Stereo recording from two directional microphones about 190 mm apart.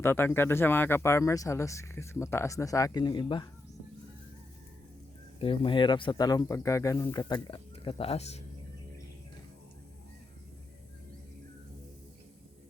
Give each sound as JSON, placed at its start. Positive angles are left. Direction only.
{"t": 0.0, "sound": "speech", "side_deg": 10}
{"t": 5.4, "sound": "speech", "side_deg": 25}